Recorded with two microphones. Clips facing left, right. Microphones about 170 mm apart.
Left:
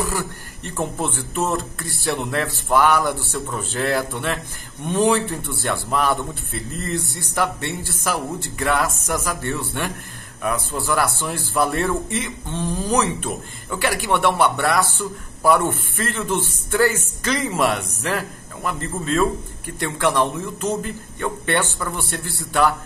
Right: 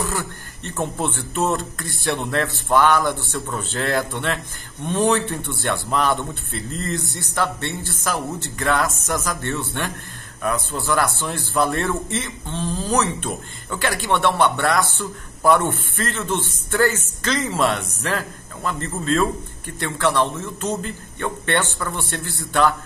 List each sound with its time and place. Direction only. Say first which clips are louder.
0.7 s speech: even; 5° left (ahead or behind)